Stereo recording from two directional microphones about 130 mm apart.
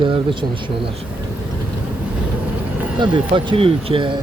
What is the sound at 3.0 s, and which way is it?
Speech, 40° right (ahead or behind).